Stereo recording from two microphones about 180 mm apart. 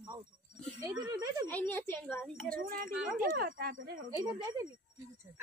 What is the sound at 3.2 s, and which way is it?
Speech, 55° right (ahead or behind).